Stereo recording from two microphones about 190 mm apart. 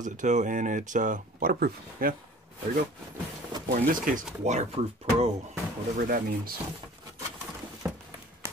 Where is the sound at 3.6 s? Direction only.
45° right (ahead or behind).